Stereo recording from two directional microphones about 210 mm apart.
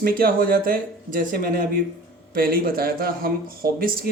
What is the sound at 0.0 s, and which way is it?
A man's voice, 45° right (ahead or behind).